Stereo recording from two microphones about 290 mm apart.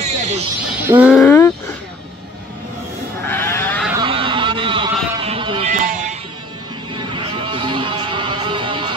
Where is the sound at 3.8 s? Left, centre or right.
Centre.